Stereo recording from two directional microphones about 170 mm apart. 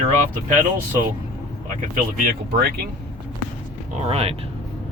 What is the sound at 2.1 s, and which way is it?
Speech, 60° right (ahead or behind).